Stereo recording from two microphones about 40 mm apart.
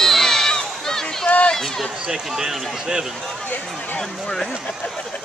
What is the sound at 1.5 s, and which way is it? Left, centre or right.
Run, centre.